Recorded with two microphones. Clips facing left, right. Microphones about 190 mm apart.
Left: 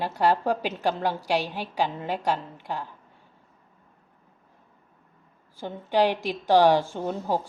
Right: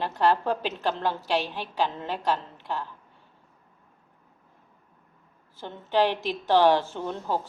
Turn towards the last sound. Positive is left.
turn(degrees=15)  # may be behind; listen again after turning